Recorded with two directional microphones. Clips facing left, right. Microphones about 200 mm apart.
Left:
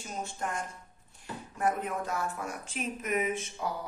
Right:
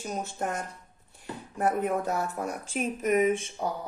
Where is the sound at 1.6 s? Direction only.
40° right (ahead or behind).